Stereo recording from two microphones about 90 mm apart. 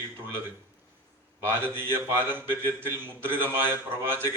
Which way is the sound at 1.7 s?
25° right (ahead or behind).